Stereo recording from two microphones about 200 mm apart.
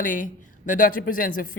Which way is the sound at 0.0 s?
40° left (ahead or behind).